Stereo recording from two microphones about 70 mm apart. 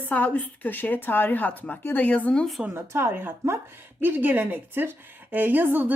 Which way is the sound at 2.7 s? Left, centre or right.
Right.